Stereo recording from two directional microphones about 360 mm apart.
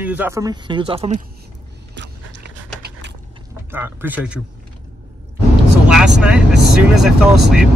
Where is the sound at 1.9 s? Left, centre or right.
Right.